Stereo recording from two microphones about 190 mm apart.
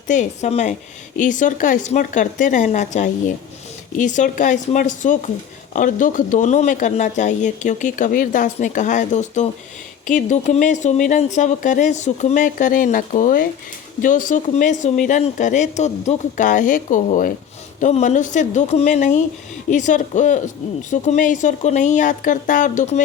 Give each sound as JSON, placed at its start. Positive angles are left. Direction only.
{"t": 0.1, "sound": "a woman's voice", "side_deg": 40}